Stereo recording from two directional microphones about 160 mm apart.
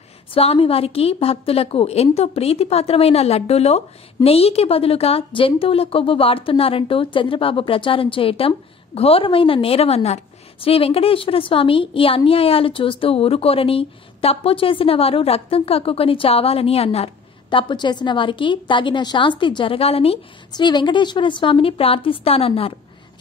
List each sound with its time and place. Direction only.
0.3 s a woman's voice: 40° left (ahead or behind)